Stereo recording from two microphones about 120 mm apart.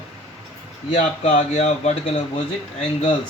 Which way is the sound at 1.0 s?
65° left (ahead or behind).